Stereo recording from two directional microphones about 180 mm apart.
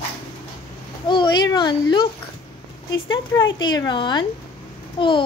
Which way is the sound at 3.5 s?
25° left (ahead or behind).